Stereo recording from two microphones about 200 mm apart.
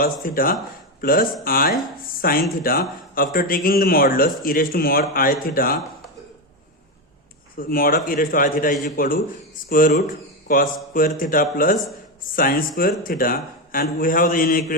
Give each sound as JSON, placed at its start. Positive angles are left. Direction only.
{"t": 0.0, "sound": "a man's voice", "side_deg": 45}
{"t": 7.6, "sound": "a man's voice", "side_deg": 45}